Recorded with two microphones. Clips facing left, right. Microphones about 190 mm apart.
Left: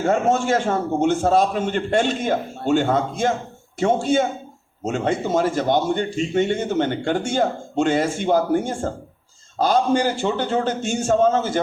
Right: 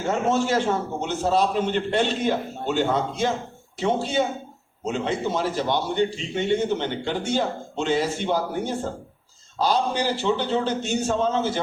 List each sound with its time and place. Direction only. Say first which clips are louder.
0.0 s a man's voice: left 3 dB; 50° left (ahead or behind)